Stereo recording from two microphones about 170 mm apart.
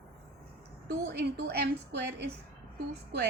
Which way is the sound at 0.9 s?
70° right (ahead or behind).